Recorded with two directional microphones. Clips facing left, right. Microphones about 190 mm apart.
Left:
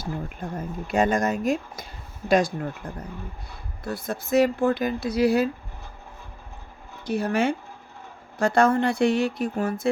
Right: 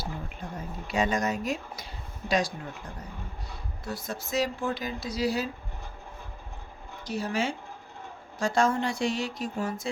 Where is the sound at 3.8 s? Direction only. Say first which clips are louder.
Left 5 dB; 55° left (ahead or behind).